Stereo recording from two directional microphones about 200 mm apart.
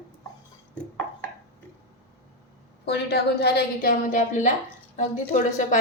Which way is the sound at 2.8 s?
55° left (ahead or behind).